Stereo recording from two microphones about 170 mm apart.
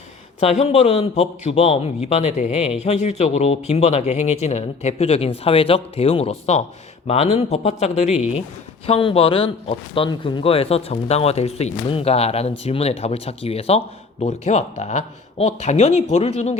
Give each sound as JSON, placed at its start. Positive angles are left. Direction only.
{"t": 0.3, "sound": "speech", "side_deg": 35}